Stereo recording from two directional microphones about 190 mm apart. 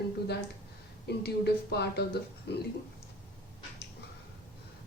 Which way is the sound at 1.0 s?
60° left (ahead or behind).